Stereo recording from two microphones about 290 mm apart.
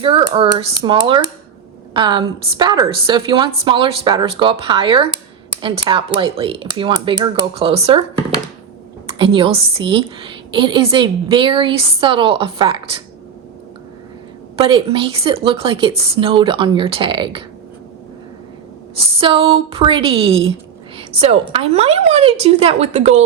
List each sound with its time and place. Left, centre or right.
0.0 s a woman's voice: centre
14.5 s a woman's voice: centre
19.2 s speech: centre